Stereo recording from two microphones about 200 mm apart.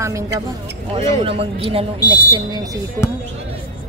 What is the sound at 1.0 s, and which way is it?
Speech, 25° right (ahead or behind).